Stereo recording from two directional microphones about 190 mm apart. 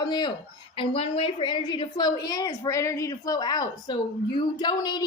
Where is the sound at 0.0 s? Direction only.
20° left (ahead or behind).